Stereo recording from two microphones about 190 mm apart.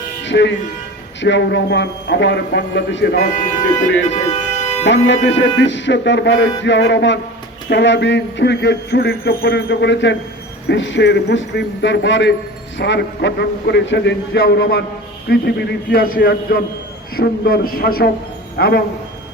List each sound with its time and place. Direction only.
0.3 s speech: 70° left (ahead or behind)
3.4 s speech: 40° left (ahead or behind)
4.9 s a man's voice: 70° left (ahead or behind)